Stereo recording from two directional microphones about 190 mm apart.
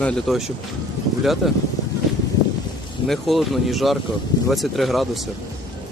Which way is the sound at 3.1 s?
Centre (ahead or behind).